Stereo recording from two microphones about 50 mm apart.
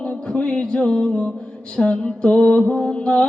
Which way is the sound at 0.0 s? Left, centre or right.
Left.